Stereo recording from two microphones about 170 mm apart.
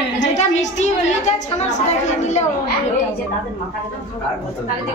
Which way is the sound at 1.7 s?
45° left (ahead or behind).